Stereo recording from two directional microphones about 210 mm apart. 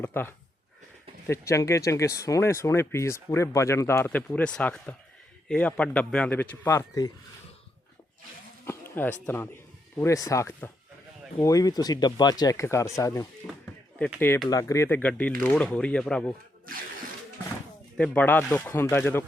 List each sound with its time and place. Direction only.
0.0 s a man's voice: 10° left (ahead or behind)
8.6 s speech: 10° left (ahead or behind)
13.4 s chop: 15° left (ahead or behind)
14.2 s a man's voice: 5° left (ahead or behind)
17.9 s speech: 5° left (ahead or behind)